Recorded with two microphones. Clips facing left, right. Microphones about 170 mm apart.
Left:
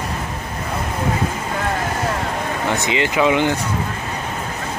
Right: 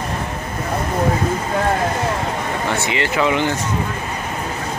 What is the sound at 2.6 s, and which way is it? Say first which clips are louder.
Speech: left 2 dB; 15° left (ahead or behind).